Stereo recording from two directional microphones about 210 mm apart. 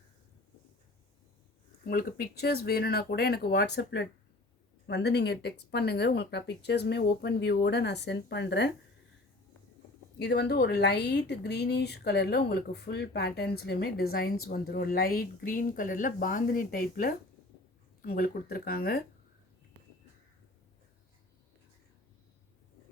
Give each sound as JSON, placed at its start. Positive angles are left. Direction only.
{"t": 1.9, "sound": "speech", "side_deg": 45}
{"t": 10.2, "sound": "speech", "side_deg": 50}